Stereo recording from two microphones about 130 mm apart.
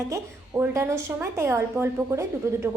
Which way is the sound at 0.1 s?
25° right (ahead or behind).